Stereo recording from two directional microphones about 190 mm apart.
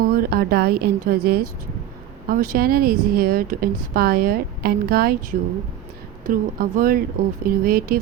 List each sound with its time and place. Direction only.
0.0 s speech: 50° right (ahead or behind)
6.2 s speech: 45° right (ahead or behind)